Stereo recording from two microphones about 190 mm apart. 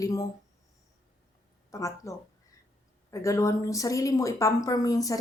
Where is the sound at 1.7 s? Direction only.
15° left (ahead or behind).